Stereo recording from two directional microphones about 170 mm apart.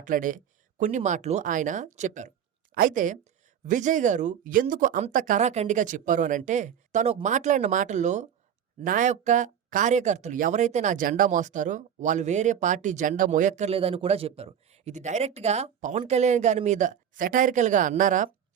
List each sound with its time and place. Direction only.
0.0 s speech: 50° right (ahead or behind)